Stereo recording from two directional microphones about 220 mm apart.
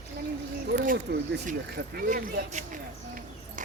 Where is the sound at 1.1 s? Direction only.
45° right (ahead or behind).